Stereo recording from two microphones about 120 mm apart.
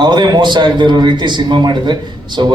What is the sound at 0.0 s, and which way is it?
A man's voice, 40° right (ahead or behind).